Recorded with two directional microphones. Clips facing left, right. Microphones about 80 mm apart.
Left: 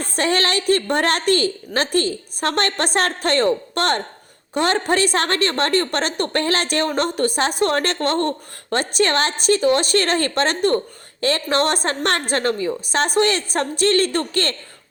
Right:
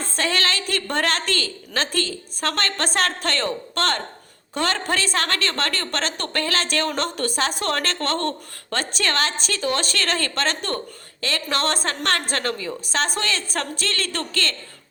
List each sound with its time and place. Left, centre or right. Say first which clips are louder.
0.2 s a sound: left 4 dB; left
0.7 s a woman's voice: left 8 dB; left
8.8 s a woman's voice: left 5 dB; left